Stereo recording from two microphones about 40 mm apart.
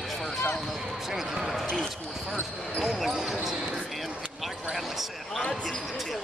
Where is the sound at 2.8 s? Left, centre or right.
Centre.